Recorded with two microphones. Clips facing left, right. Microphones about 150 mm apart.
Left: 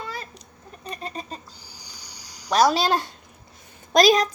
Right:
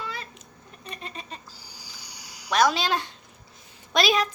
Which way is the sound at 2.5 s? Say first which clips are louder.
Left 3 dB; 35° left (ahead or behind).